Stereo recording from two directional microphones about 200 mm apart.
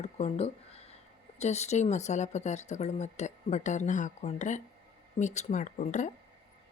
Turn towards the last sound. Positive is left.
turn(degrees=35)  # may be behind; listen again after turning